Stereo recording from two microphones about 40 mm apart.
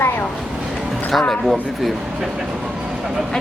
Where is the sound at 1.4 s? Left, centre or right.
Centre.